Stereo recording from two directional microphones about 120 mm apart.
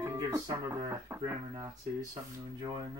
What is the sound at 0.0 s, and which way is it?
Speech, 30° right (ahead or behind).